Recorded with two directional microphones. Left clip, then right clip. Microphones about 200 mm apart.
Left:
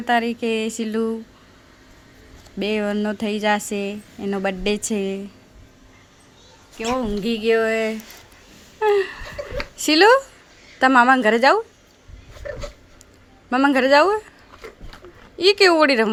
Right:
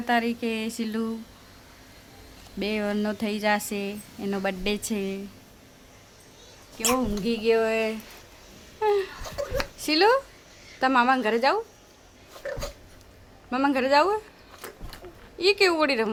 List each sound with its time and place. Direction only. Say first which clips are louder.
0.0 s a woman's voice: left 5 dB; 15° left (ahead or behind)
2.6 s a woman's voice: left 5 dB; 15° left (ahead or behind)
6.9 s a sound: left 4 dB; 40° left (ahead or behind)
9.7 s a woman's voice: left 8 dB; 35° left (ahead or behind)
13.5 s a woman's voice: left 7 dB; 30° left (ahead or behind)
15.4 s a woman's voice: left 7 dB; 30° left (ahead or behind)